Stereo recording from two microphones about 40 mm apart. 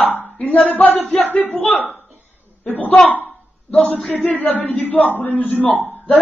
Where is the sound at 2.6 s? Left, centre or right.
Left.